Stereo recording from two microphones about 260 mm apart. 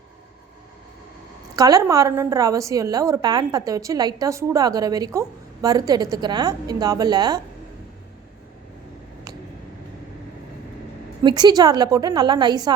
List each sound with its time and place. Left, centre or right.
1.5 s a woman's voice: centre
11.2 s a woman's voice: centre